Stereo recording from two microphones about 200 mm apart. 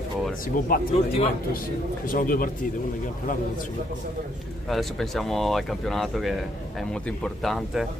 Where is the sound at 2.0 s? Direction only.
45° left (ahead or behind).